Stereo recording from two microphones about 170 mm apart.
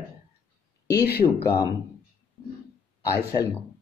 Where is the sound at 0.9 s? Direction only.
70° left (ahead or behind).